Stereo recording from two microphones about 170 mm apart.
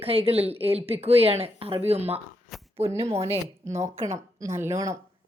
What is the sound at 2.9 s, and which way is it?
A woman's voice, 15° right (ahead or behind).